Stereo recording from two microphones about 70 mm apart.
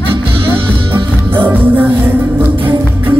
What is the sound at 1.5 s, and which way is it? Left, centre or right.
Music, right.